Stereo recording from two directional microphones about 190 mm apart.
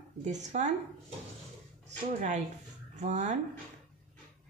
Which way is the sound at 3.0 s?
40° right (ahead or behind).